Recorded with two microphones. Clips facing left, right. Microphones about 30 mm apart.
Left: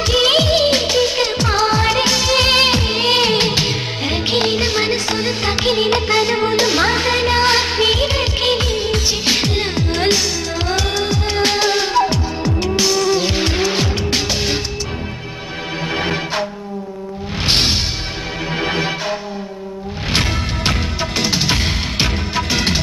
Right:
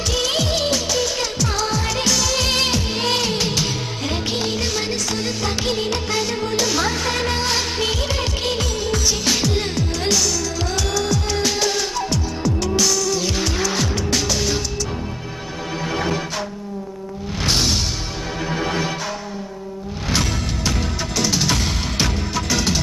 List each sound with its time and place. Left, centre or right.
0.1 s music: left
15.8 s music: left
17.5 s music: left